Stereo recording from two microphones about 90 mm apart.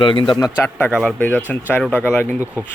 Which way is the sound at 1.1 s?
20° left (ahead or behind).